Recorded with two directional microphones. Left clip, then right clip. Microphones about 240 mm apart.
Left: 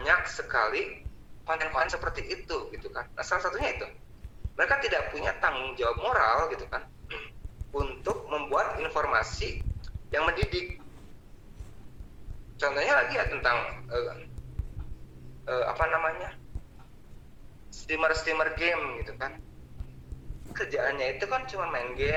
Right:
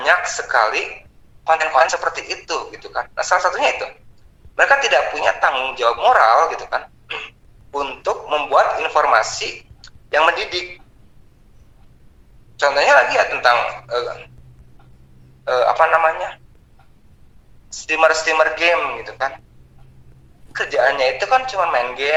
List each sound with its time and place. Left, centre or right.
0.0 s a man's voice: right
12.5 s a man's voice: right
15.4 s a man's voice: right
17.7 s a man's voice: right
20.5 s a man's voice: right